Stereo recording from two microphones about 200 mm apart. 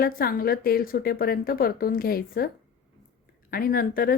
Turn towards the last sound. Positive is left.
turn(degrees=50)  # may be behind; listen again after turning